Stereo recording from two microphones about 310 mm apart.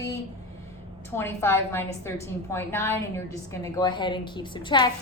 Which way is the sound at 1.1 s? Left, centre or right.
Centre.